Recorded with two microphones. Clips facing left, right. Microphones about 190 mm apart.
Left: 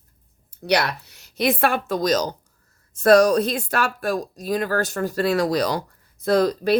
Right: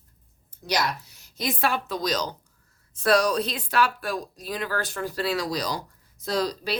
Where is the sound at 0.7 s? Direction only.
65° left (ahead or behind).